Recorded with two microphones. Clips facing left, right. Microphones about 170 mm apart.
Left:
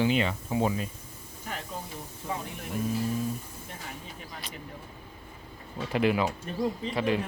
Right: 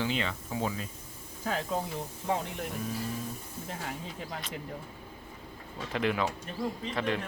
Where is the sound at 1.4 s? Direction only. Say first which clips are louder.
Right 7 dB; 90° right.